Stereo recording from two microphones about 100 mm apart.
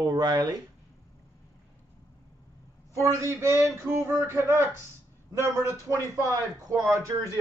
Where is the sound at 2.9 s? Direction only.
30° right (ahead or behind).